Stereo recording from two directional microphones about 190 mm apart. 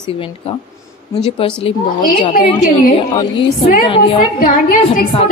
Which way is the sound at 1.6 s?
40° left (ahead or behind).